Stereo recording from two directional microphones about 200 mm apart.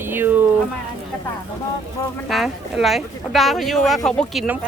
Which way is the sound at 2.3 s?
Centre (ahead or behind).